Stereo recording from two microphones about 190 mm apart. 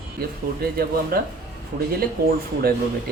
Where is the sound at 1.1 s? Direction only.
50° right (ahead or behind).